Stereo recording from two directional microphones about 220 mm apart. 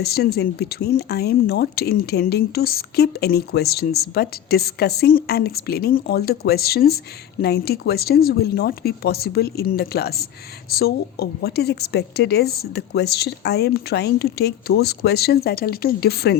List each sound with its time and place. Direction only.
0.0 s speech: 45° left (ahead or behind)